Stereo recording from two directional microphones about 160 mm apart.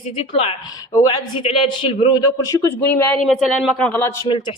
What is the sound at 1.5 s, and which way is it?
A woman's voice, 35° left (ahead or behind).